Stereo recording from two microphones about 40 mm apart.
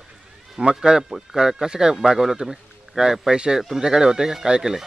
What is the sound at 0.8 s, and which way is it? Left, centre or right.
A man's voice, centre.